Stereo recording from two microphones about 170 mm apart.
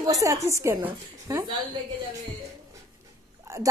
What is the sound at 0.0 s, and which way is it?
Speech, 20° right (ahead or behind).